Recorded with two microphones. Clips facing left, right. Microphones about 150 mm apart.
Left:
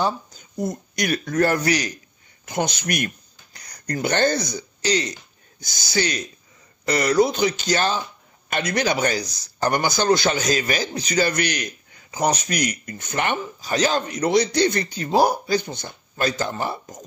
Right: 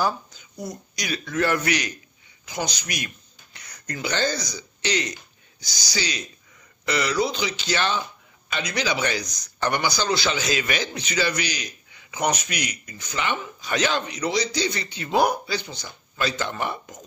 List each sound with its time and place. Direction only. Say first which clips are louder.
0.3 s speech: left 7 dB; 45° left (ahead or behind)
2.4 s speech: left 5 dB; 55° left (ahead or behind)
3.5 s speech: left 7 dB; 40° left (ahead or behind); by 4.6 s 55° left (ahead or behind)
4.8 s a man's voice: left 4 dB; 35° left (ahead or behind)
5.6 s speech: left 6 dB; 50° left (ahead or behind)
8.5 s speech: left 4 dB; 55° left (ahead or behind)
12.1 s speech: left 3 dB; 35° left (ahead or behind); by 13.4 s 55° left (ahead or behind)
13.6 s a man's voice: left 3 dB; 35° left (ahead or behind)